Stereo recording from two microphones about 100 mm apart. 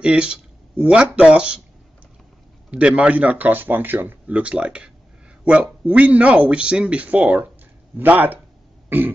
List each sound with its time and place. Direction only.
0.0 s speech: 10° right (ahead or behind)
2.7 s speech: 10° right (ahead or behind)
8.8 s throat clearing: 20° right (ahead or behind)